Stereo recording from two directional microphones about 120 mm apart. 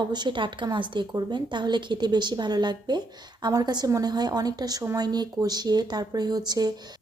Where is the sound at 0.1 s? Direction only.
40° right (ahead or behind).